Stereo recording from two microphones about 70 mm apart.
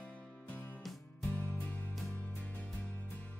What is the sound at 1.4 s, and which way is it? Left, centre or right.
Music, left.